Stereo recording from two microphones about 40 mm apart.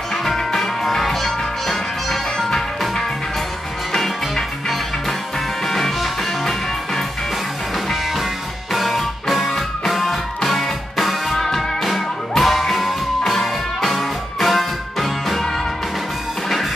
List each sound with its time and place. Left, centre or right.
0.1 s music: centre
3.9 s music: centre
7.7 s music: centre